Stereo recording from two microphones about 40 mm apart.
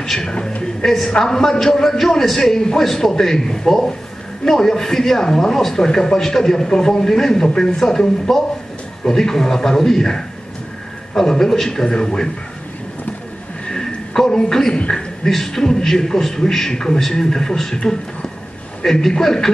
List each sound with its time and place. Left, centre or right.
0.0 s a woman's voice: centre
13.7 s a sound: centre
14.7 s speech: left
15.0 s a man's voice: centre
18.9 s a man's voice: centre